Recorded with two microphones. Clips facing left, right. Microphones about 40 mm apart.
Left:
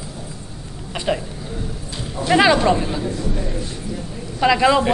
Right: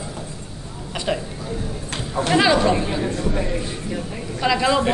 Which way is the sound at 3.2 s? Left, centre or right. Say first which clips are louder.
Right 2 dB; right.